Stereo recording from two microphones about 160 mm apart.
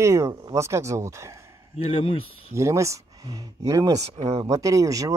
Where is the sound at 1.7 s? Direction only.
40° left (ahead or behind).